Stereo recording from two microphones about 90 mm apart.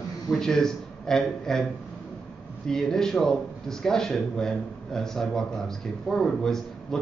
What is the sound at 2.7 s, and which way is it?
A man's voice, 5° left (ahead or behind).